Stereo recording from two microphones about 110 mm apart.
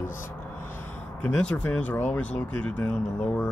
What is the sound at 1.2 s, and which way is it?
Speech, 10° left (ahead or behind).